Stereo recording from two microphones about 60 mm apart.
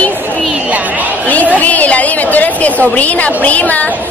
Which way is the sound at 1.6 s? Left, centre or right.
Left.